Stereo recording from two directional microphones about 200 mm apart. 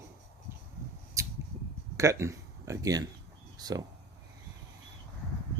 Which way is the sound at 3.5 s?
20° right (ahead or behind).